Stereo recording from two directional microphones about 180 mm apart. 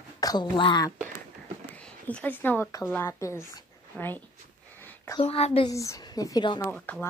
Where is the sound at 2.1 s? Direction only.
10° left (ahead or behind).